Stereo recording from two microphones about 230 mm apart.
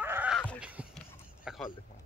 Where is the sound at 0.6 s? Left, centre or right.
Centre.